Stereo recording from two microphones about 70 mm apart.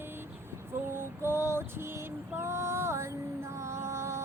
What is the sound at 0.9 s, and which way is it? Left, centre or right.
Female singing, right.